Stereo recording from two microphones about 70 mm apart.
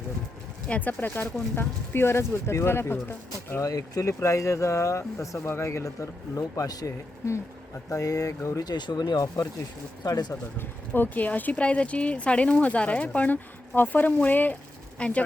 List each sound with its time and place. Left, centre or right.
0.7 s speech: left
3.6 s speech: left
7.9 s speech: left
8.6 s speech: left
9.2 s speech: left
10.0 s speech: left
10.6 s speech: left